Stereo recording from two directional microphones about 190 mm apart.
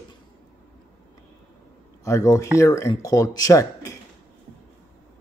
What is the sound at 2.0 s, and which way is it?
Speech, 15° left (ahead or behind).